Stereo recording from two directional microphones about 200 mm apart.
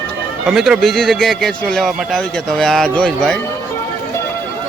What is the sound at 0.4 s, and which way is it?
Speech, centre (ahead or behind).